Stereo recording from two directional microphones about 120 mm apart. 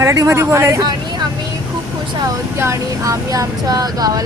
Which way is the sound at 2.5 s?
25° right (ahead or behind).